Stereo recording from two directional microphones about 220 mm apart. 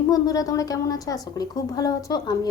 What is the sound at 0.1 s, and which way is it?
A woman's voice, 15° left (ahead or behind).